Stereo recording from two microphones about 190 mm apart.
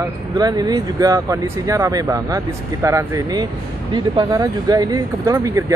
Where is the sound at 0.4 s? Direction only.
20° right (ahead or behind).